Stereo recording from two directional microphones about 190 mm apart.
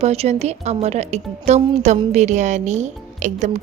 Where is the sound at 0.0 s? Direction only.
35° right (ahead or behind).